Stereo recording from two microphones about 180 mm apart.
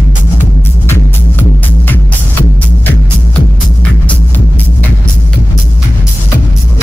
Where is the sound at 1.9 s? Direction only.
10° left (ahead or behind).